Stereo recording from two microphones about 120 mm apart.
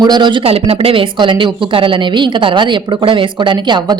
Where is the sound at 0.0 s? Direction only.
40° right (ahead or behind).